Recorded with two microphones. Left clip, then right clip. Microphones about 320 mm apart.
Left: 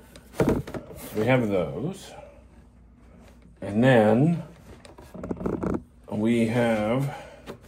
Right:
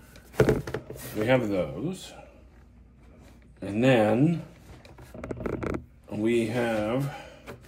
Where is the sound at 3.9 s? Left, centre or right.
Centre.